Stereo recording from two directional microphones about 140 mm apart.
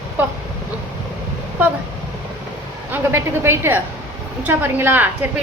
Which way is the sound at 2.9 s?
15° right (ahead or behind).